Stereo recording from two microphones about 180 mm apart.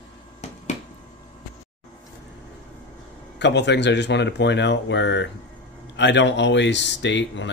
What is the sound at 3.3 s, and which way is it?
A man's voice, 75° left (ahead or behind).